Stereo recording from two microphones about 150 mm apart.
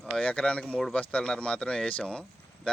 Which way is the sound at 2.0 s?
5° left (ahead or behind).